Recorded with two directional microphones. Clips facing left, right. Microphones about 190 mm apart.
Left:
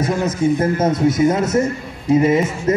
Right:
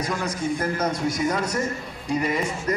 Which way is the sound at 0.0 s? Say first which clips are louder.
Left 9 dB; 25° left (ahead or behind).